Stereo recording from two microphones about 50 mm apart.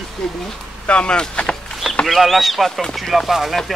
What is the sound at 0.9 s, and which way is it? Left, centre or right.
Speech, left.